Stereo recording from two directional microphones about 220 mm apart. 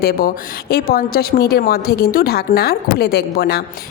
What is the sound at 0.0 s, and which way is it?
A woman's voice, 45° left (ahead or behind).